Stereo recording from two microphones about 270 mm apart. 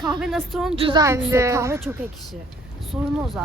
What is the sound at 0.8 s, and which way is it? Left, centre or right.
A woman's voice, centre.